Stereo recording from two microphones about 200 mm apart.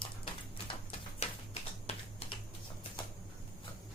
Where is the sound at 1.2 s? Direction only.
35° left (ahead or behind).